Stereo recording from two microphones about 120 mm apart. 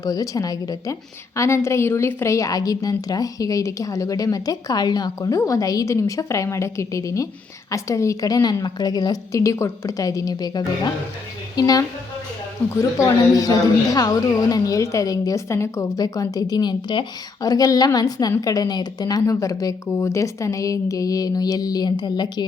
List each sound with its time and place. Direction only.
0.0 s a woman's voice: 30° left (ahead or behind)
13.0 s a woman's voice: 30° left (ahead or behind)